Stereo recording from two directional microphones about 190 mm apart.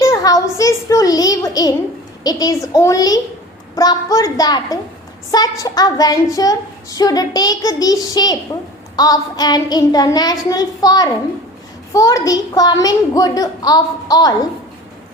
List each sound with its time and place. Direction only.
0.0 s a woman's voice: 20° left (ahead or behind)